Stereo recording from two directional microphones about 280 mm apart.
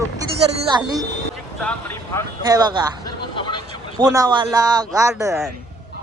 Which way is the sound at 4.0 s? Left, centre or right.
Centre.